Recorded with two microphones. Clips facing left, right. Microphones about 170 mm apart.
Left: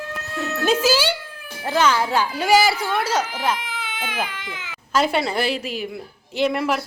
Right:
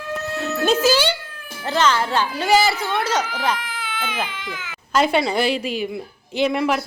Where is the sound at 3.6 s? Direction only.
20° left (ahead or behind).